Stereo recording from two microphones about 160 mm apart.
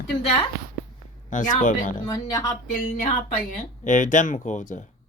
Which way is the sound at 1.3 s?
55° left (ahead or behind).